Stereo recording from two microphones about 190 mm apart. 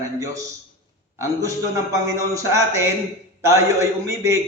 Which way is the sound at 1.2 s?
15° right (ahead or behind).